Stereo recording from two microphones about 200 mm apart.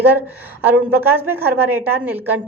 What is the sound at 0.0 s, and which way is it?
A woman's voice, 10° right (ahead or behind).